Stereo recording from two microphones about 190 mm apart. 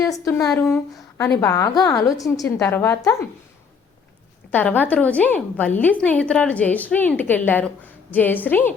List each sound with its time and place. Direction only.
0.0 s speech: 15° left (ahead or behind)
0.5 s speech: centre (ahead or behind)
1.4 s a woman's voice: 15° left (ahead or behind)
4.5 s a woman's voice: 10° left (ahead or behind)